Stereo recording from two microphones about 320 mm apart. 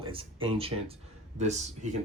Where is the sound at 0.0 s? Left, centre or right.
Centre.